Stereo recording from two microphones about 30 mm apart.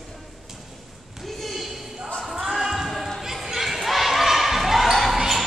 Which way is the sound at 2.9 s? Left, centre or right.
Centre.